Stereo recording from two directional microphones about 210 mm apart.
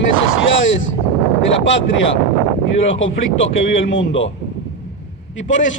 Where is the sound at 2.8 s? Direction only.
65° left (ahead or behind).